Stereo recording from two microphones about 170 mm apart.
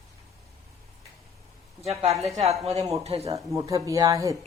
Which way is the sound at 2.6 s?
35° right (ahead or behind).